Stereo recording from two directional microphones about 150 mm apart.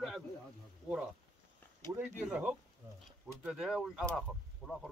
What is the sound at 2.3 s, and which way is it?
Speech, 5° right (ahead or behind).